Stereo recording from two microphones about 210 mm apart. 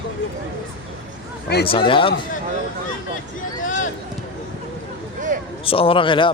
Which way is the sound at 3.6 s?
40° left (ahead or behind).